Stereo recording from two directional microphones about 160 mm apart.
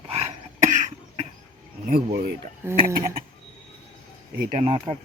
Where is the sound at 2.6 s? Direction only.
15° right (ahead or behind).